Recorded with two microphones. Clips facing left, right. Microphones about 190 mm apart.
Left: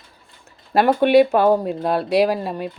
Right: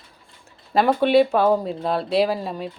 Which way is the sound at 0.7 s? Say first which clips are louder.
Left 3 dB; 5° left (ahead or behind).